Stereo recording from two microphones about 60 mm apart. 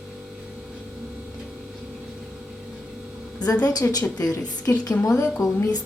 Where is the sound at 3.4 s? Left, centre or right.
Left.